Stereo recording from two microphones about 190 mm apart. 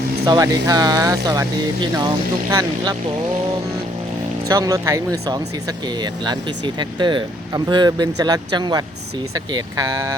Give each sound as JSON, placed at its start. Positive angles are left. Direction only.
{"t": 0.3, "sound": "speech", "side_deg": -20}
{"t": 4.4, "sound": "speech", "side_deg": -15}
{"t": 6.7, "sound": "speech", "side_deg": -25}